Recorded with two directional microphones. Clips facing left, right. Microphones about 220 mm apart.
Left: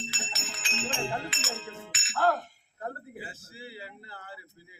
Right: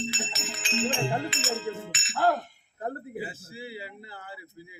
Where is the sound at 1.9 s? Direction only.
5° left (ahead or behind).